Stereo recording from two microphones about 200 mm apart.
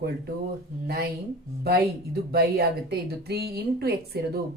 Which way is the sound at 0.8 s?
50° right (ahead or behind).